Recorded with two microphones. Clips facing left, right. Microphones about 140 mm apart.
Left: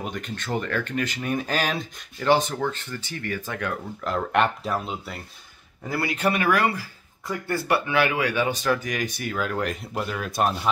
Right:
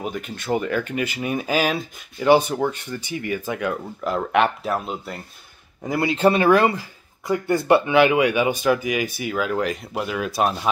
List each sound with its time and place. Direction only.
0.0 s speech: 5° right (ahead or behind)
5.9 s speech: 20° right (ahead or behind); by 10.7 s 5° right (ahead or behind)